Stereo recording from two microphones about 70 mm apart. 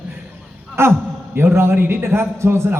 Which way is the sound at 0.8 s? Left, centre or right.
Right.